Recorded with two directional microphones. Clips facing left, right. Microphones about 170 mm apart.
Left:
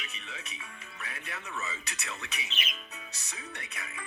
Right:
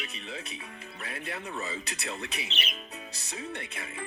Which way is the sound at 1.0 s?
30° right (ahead or behind).